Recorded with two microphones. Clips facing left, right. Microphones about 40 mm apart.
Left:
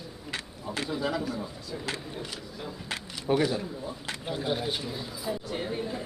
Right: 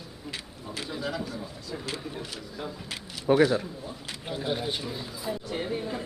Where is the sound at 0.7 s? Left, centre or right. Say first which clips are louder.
Left 3 dB; centre.